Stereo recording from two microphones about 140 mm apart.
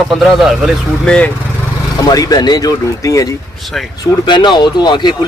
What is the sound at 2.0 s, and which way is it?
Speech, 25° left (ahead or behind).